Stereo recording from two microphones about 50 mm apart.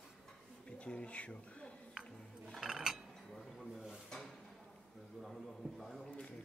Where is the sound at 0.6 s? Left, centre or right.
Left.